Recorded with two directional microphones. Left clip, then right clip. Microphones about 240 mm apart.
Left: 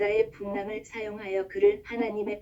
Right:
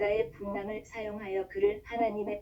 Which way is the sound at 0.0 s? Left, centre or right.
Left.